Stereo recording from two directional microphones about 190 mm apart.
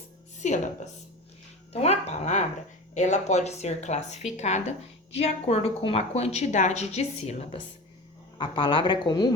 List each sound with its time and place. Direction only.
0.3 s a woman's voice: 40° left (ahead or behind)
1.7 s a woman's voice: 35° left (ahead or behind)